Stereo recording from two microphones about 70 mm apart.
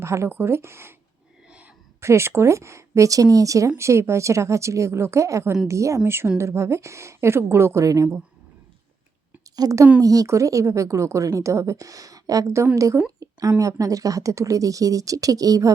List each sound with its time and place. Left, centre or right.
0.0 s a woman's voice: right
2.0 s a woman's voice: right
3.8 s a woman's voice: right
9.6 s a woman's voice: right